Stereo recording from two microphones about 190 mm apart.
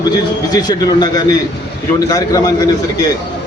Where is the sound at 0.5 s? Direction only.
20° left (ahead or behind).